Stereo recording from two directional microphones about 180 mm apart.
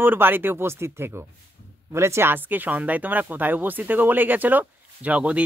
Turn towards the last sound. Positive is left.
turn(degrees=-5)  # may be behind; listen again after turning